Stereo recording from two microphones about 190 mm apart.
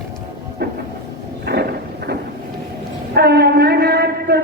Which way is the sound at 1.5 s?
60° right (ahead or behind).